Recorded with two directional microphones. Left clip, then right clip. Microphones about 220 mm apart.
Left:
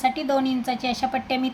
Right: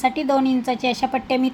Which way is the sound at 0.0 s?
15° right (ahead or behind).